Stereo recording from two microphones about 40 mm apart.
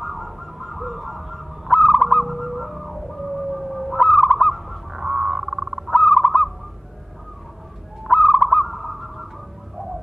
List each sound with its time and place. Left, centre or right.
0.0 s a sound: centre
1.8 s fowl: centre
2.2 s a sound: centre
3.5 s fowl: centre
5.9 s owl: centre
8.1 s owl: centre